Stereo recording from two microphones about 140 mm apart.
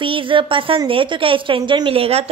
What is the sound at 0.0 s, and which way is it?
A woman's voice, 35° right (ahead or behind).